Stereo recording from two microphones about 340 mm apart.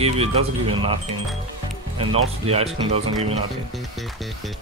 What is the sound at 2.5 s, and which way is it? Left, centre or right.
Speech, centre.